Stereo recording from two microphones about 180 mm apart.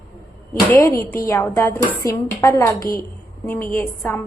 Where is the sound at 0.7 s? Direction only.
15° left (ahead or behind).